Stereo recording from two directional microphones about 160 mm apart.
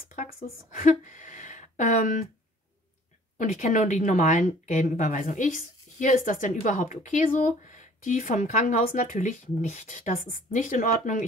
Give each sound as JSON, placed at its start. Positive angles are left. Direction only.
{"t": 0.1, "sound": "speech", "side_deg": 55}
{"t": 3.3, "sound": "speech", "side_deg": 50}